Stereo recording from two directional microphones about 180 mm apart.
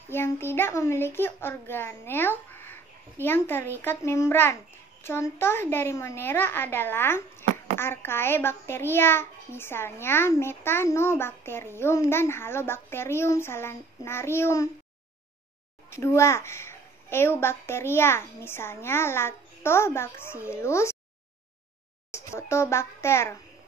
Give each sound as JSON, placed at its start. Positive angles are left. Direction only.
{"t": 0.1, "sound": "a child's voice", "side_deg": 15}
{"t": 15.9, "sound": "a woman's voice", "side_deg": 15}
{"t": 22.1, "sound": "a child's voice", "side_deg": 15}